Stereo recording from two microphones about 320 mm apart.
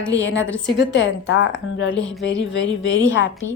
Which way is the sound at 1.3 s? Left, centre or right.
Left.